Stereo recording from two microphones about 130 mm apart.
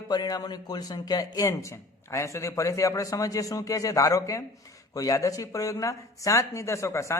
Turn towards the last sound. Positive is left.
turn(degrees=20)  # may be behind; listen again after turning